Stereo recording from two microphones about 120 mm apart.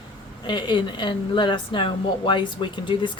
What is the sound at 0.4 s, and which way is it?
Speech, 40° left (ahead or behind).